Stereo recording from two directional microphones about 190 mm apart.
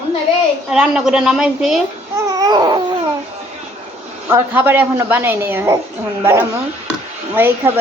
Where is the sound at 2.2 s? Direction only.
20° right (ahead or behind).